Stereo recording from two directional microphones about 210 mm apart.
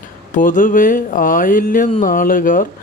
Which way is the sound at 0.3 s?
40° left (ahead or behind).